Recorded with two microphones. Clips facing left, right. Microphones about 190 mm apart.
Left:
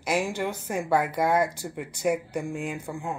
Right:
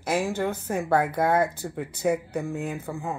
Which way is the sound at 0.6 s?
10° left (ahead or behind).